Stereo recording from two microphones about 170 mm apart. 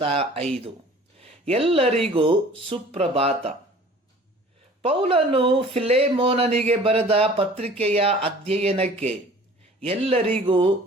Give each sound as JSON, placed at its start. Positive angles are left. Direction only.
{"t": 0.0, "sound": "speech", "side_deg": -35}
{"t": 4.8, "sound": "speech", "side_deg": -35}